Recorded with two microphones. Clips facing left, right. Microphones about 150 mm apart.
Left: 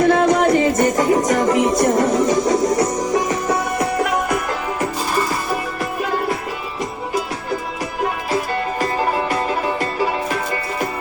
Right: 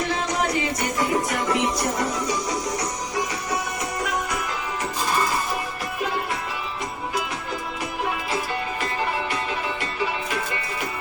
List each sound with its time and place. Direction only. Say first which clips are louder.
0.0 s music: left 11 dB; 55° left (ahead or behind)
9.3 s music: left 7 dB; 40° left (ahead or behind)